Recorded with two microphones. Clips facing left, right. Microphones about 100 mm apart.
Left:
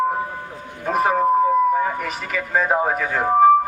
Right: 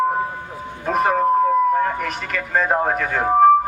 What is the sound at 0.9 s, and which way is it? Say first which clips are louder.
Speech: even; centre (ahead or behind).